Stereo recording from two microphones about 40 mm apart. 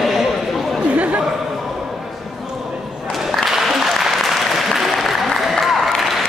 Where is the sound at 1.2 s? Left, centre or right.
Centre.